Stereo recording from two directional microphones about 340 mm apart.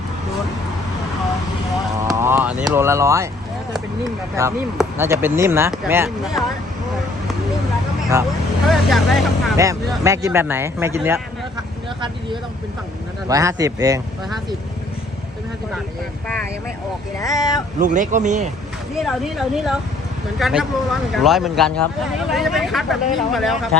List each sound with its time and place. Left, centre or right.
2.0 s vehicle: centre
4.4 s speech: centre
8.7 s speech: centre
13.2 s speech: centre
17.2 s speech: centre
17.7 s speech: right
19.0 s speech: centre